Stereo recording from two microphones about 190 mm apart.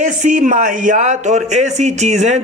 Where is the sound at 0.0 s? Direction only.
40° right (ahead or behind).